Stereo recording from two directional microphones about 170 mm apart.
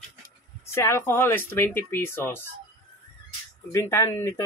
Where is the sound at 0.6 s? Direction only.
15° left (ahead or behind).